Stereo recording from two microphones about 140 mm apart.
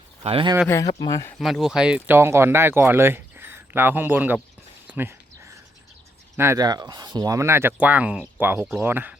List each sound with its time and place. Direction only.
0.2 s speech: 40° right (ahead or behind)
0.7 s speech: 25° left (ahead or behind)
1.4 s speech: centre (ahead or behind)
4.9 s a sound: 15° right (ahead or behind)
6.3 s speech: 20° right (ahead or behind)